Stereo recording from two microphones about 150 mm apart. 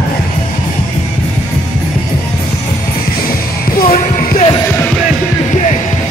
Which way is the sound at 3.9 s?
70° left (ahead or behind).